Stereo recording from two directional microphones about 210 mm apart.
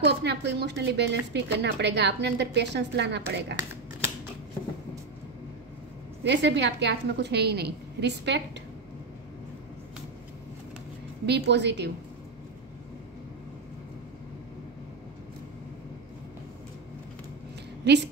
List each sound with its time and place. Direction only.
0.0 s a woman's voice: 55° right (ahead or behind)
6.2 s a woman's voice: 55° right (ahead or behind)
11.2 s a woman's voice: 55° right (ahead or behind)
17.8 s a woman's voice: 55° right (ahead or behind)